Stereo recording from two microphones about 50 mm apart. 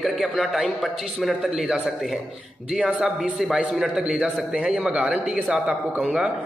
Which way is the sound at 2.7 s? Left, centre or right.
Centre.